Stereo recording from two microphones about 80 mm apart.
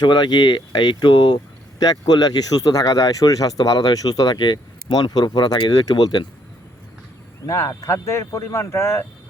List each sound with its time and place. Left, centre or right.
0.0 s speech: left
1.8 s speech: left
7.4 s speech: left
7.7 s speech: left